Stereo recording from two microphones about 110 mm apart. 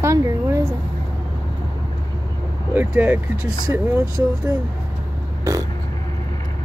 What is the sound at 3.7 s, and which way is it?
Speech, 25° right (ahead or behind).